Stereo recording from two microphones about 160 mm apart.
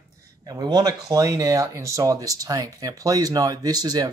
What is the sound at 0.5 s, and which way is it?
Speech, 25° right (ahead or behind).